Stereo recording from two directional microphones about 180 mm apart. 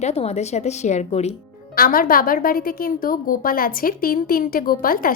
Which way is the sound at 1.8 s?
50° left (ahead or behind).